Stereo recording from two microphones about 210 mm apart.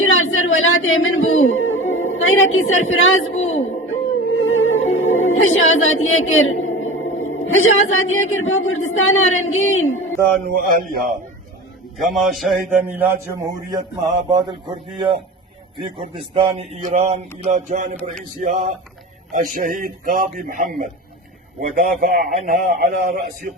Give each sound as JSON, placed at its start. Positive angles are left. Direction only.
{"t": 0.0, "sound": "music", "side_deg": 70}
{"t": 4.4, "sound": "speech", "side_deg": 70}
{"t": 10.2, "sound": "a man's voice", "side_deg": -45}
{"t": 11.9, "sound": "a man's voice", "side_deg": 0}